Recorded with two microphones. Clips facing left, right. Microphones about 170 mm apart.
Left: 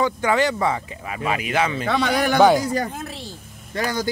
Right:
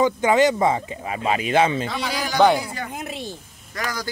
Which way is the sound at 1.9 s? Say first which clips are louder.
Left 7 dB; 65° left (ahead or behind).